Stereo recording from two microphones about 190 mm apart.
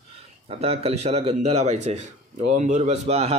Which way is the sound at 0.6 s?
30° right (ahead or behind).